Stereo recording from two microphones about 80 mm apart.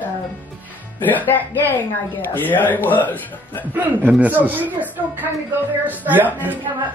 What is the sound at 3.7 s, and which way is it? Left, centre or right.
A man's voice, right.